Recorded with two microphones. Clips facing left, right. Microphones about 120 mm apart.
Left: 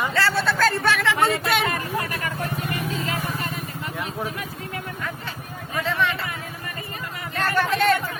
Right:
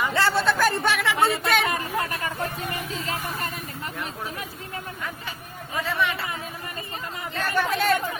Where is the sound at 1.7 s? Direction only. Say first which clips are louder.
Even; 25° right (ahead or behind).